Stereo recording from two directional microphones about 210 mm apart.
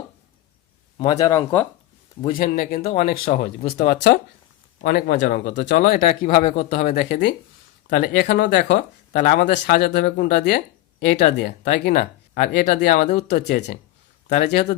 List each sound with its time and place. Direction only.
0.9 s speech: 20° left (ahead or behind)
2.3 s speech: 40° left (ahead or behind)